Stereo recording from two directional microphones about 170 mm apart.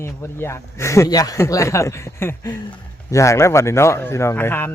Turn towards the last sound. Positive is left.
turn(degrees=10)  # may be behind; listen again after turning